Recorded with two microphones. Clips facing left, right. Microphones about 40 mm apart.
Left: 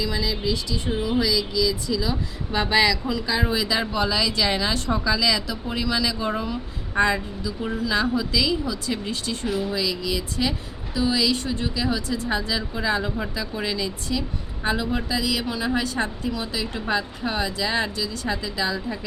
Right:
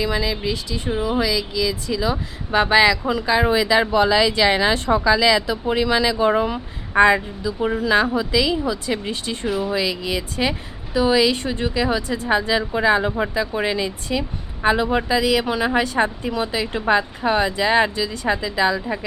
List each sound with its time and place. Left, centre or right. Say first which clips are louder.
0.0 s a woman's voice: right 4 dB; right
0.9 s a woman's voice: right 3 dB; centre
9.5 s speech: right 4 dB; centre
9.7 s a woman's voice: right 3 dB; right